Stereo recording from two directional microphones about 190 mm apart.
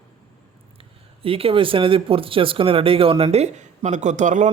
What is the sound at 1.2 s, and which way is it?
Speech, 30° right (ahead or behind).